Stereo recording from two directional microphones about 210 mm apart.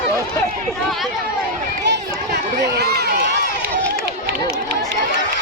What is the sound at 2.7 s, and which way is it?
Run, 50° right (ahead or behind).